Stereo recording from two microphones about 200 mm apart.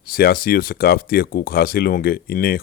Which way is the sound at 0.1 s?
50° left (ahead or behind).